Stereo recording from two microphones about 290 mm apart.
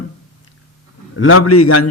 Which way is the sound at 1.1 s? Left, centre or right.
Left.